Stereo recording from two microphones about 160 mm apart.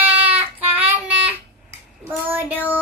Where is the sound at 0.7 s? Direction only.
10° right (ahead or behind).